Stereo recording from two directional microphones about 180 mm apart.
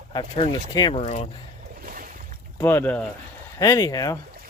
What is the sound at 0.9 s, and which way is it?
Speech, 40° left (ahead or behind).